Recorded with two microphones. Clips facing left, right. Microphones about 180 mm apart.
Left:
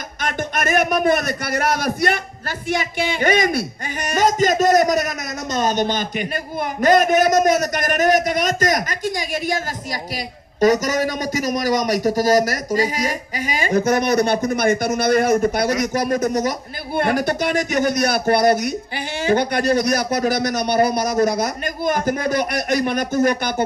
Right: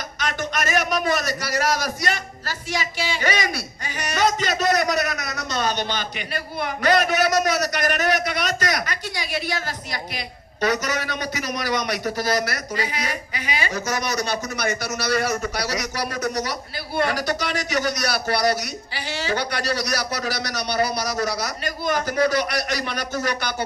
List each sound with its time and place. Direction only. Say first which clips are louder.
0.2 s a man's voice: left 3 dB; 55° left (ahead or behind)
10.6 s a man's voice: left 7 dB; 45° left (ahead or behind)